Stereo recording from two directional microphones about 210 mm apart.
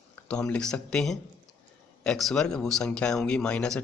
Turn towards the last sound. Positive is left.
turn(degrees=5)  # may be behind; listen again after turning